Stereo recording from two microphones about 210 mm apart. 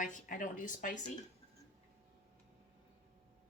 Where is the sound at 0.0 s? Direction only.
35° left (ahead or behind).